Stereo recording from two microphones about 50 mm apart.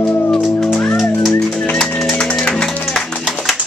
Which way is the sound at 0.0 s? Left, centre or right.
Left.